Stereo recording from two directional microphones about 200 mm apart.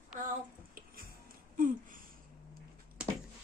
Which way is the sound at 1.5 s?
40° right (ahead or behind).